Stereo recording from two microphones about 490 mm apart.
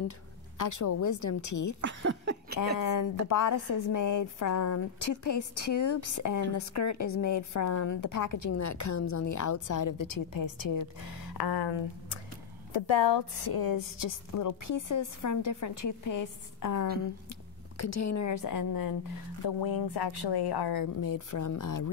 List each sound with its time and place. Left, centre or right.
0.6 s a woman's voice: left
1.8 s speech: right
2.8 s a woman's voice: left
12.7 s a woman's voice: left